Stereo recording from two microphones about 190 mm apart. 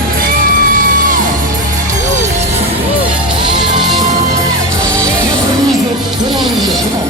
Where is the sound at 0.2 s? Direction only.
45° right (ahead or behind).